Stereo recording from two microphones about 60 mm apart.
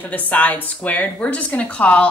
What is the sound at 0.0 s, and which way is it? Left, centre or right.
Speech, left.